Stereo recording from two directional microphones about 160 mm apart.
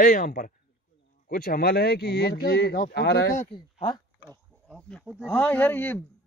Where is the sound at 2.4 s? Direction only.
75° left (ahead or behind).